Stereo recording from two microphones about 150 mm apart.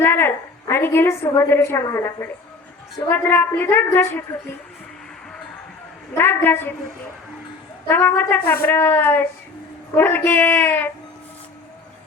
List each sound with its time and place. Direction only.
0.0 s a woman's voice: 15° left (ahead or behind)
6.1 s a woman's voice: 15° left (ahead or behind)
7.9 s a woman's voice: 15° left (ahead or behind)